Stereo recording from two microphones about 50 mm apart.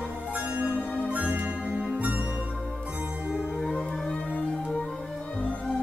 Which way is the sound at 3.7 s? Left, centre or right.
Centre.